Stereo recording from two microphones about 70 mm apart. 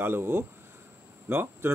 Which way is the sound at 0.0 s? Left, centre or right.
Right.